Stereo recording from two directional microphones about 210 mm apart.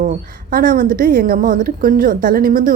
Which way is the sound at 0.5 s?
40° right (ahead or behind).